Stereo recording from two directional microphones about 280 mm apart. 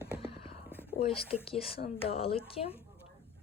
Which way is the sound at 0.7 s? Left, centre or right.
Centre.